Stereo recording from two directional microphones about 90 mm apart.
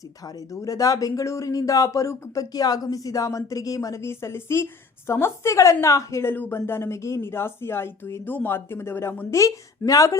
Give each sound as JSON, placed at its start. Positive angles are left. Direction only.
{"t": 0.5, "sound": "speech", "side_deg": 40}
{"t": 6.3, "sound": "speech", "side_deg": 25}